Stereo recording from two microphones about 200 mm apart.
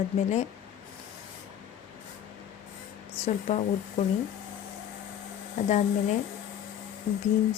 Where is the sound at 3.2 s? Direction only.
35° left (ahead or behind).